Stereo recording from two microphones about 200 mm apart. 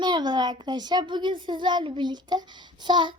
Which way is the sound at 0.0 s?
20° right (ahead or behind).